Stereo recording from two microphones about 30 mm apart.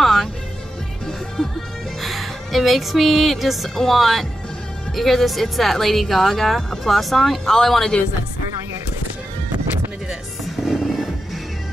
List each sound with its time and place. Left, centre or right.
0.0 s music: centre
1.0 s music: centre
2.0 s a woman's voice: centre
7.4 s speech: centre
10.4 s music: centre